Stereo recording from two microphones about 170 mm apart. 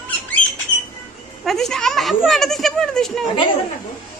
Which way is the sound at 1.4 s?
Centre (ahead or behind).